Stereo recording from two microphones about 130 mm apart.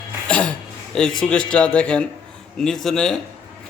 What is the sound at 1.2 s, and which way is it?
A man's voice, 5° left (ahead or behind).